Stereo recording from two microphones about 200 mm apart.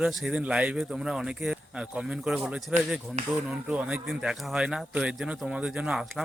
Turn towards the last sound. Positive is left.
turn(degrees=-5)  # may be behind; listen again after turning